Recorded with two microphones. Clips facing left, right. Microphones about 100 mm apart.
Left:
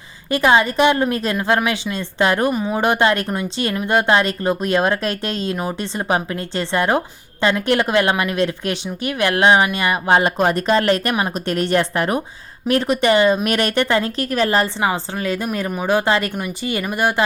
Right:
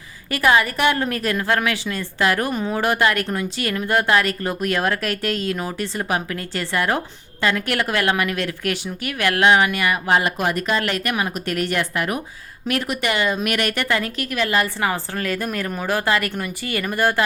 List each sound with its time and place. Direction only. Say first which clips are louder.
0.3 s speech: left 3 dB; 25° left (ahead or behind)
2.5 s speech: left 3 dB; 15° left (ahead or behind); by 14.7 s 35° left (ahead or behind)
14.8 s speech: left 2 dB; 20° left (ahead or behind)